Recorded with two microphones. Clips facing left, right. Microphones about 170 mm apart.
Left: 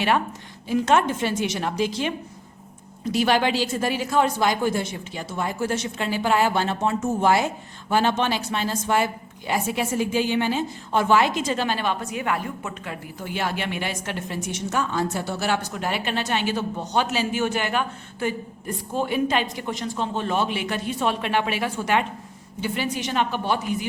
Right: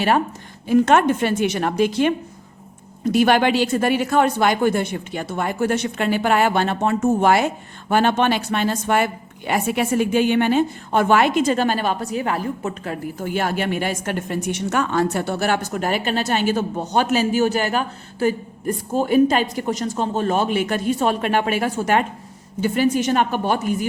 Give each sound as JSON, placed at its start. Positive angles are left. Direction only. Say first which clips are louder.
{"t": 0.7, "sound": "a woman's voice", "louder": "right 5 dB", "side_deg": -55}